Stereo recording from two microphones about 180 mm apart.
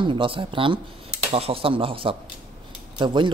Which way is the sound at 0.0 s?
30° right (ahead or behind).